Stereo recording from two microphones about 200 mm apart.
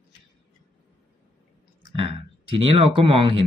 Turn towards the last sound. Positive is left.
turn(degrees=-25)  # may be behind; listen again after turning